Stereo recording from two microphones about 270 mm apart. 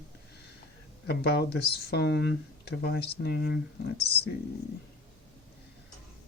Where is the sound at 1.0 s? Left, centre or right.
Left.